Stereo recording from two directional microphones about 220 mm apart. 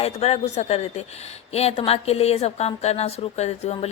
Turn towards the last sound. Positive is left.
turn(degrees=30)  # may be behind; listen again after turning